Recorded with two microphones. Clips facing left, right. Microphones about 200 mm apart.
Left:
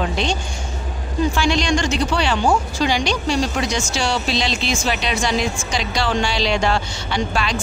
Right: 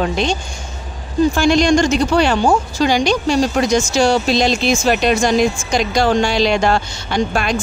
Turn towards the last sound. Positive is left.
turn(degrees=-50)  # may be behind; listen again after turning